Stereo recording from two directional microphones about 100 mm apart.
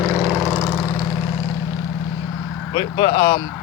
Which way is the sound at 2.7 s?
55° left (ahead or behind).